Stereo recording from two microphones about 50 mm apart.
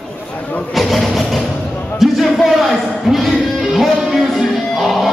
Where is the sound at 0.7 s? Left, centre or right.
Centre.